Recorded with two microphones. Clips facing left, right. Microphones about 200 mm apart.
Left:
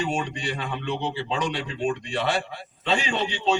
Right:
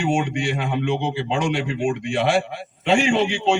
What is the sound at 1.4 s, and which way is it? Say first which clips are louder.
A man's voice: right 6 dB; 25° right (ahead or behind).